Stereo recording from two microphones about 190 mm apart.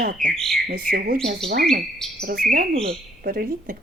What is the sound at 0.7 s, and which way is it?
Speech, 50° right (ahead or behind).